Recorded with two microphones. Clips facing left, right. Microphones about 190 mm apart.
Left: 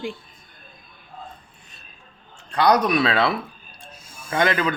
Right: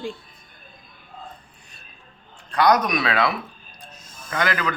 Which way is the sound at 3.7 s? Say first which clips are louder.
Even; 10° left (ahead or behind).